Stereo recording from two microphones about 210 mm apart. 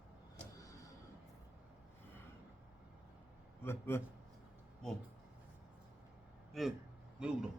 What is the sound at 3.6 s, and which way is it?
Speech, 10° left (ahead or behind).